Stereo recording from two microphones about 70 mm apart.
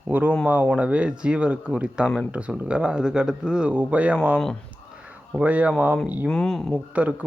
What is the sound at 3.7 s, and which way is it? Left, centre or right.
Speech, right.